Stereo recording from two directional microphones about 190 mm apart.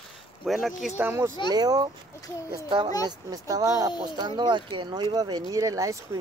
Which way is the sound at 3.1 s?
20° right (ahead or behind).